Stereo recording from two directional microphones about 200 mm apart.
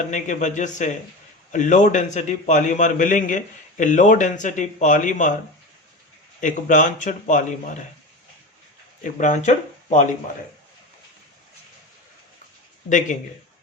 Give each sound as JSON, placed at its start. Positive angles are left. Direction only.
{"t": 0.1, "sound": "a man's voice", "side_deg": 40}
{"t": 6.4, "sound": "a man's voice", "side_deg": 40}
{"t": 9.0, "sound": "a man's voice", "side_deg": 40}
{"t": 12.9, "sound": "a man's voice", "side_deg": 40}